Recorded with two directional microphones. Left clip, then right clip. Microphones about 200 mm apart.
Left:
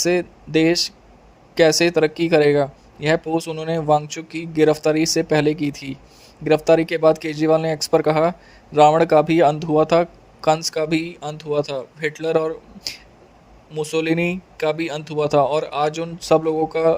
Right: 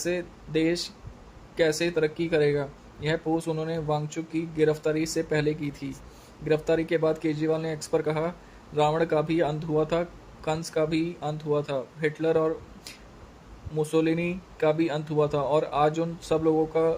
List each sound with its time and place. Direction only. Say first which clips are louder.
0.0 s speech: left 10 dB; 50° left (ahead or behind)